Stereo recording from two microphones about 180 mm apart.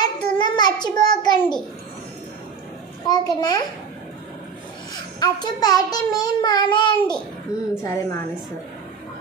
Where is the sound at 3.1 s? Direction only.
25° left (ahead or behind).